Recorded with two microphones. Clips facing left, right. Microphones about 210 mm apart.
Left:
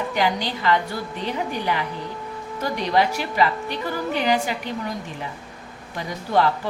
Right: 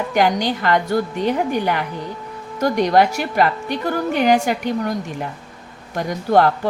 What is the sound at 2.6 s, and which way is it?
A woman's voice, 50° right (ahead or behind).